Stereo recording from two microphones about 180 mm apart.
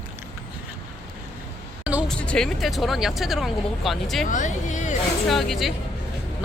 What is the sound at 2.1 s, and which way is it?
Speech, 5° left (ahead or behind).